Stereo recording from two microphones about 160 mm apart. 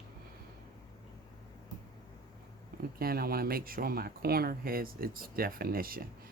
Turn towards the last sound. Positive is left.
turn(degrees=-65)  # may be behind; listen again after turning